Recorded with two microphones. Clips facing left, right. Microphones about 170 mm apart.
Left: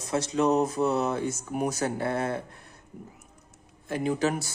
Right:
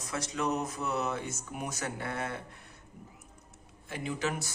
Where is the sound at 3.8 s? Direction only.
40° left (ahead or behind).